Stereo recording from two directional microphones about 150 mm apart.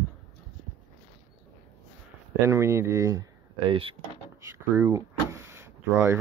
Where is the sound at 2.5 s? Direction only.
20° right (ahead or behind).